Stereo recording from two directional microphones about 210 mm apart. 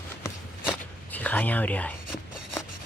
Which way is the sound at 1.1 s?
10° left (ahead or behind).